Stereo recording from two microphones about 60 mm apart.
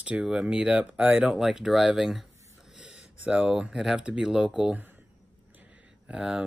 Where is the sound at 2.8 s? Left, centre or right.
Centre.